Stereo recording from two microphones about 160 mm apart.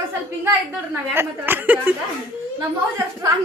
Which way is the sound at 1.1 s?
15° right (ahead or behind).